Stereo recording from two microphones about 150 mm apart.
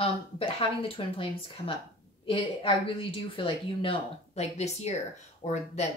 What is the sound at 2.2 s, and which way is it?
A woman's voice, 40° left (ahead or behind).